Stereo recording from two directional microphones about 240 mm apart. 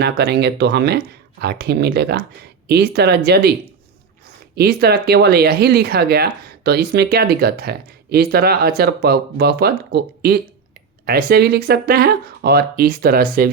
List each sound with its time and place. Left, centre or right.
0.0 s speech: right
4.5 s speech: right